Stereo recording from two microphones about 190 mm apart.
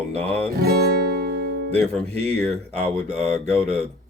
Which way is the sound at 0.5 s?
55° right (ahead or behind).